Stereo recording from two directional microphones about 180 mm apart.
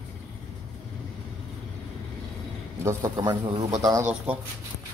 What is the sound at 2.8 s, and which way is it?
A man's voice, 20° right (ahead or behind).